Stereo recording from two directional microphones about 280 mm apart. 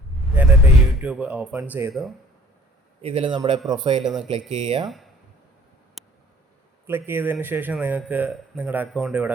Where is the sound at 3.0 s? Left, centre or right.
Right.